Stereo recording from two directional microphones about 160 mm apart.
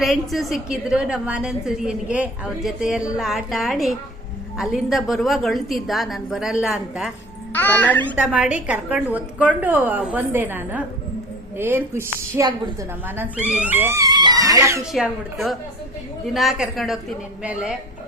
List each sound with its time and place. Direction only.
0.0 s a woman's voice: centre (ahead or behind)
7.5 s speech: 10° left (ahead or behind)
8.1 s a woman's voice: 5° right (ahead or behind)
16.3 s a woman's voice: centre (ahead or behind)